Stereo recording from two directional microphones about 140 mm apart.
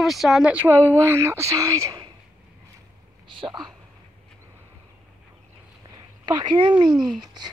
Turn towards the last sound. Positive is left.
turn(degrees=0)  # may be behind; listen again after turning